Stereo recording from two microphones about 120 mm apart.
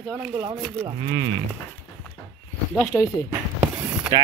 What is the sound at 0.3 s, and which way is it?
Speech, 35° right (ahead or behind).